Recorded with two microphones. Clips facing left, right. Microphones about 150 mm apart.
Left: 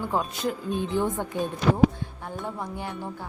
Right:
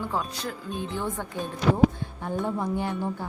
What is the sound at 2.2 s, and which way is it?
Music, centre (ahead or behind).